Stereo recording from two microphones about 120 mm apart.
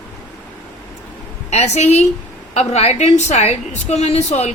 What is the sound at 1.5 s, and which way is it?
A woman's voice, 65° left (ahead or behind).